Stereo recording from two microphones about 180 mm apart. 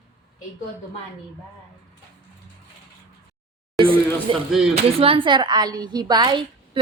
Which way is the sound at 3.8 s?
30° right (ahead or behind).